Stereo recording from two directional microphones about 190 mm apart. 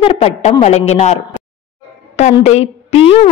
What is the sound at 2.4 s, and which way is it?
Speech, 35° left (ahead or behind).